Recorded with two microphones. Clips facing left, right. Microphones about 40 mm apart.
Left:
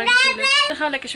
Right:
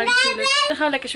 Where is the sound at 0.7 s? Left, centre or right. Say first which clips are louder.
Right 2 dB; centre.